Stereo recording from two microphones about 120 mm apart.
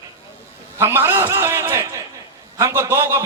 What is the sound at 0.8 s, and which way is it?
A man's voice, 20° right (ahead or behind).